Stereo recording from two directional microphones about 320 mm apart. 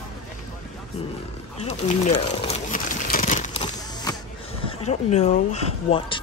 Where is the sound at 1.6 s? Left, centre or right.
Left.